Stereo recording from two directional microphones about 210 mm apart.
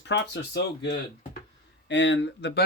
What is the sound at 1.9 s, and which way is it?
Speech, 60° left (ahead or behind).